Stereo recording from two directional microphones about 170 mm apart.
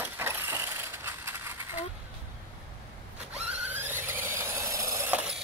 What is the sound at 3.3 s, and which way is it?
Squeal, 10° right (ahead or behind).